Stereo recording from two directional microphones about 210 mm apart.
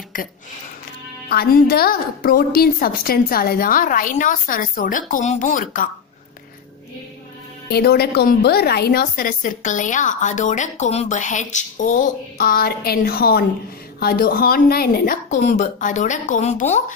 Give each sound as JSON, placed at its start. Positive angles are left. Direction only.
{"t": 1.3, "sound": "a woman's voice", "side_deg": 50}
{"t": 7.6, "sound": "a woman's voice", "side_deg": 50}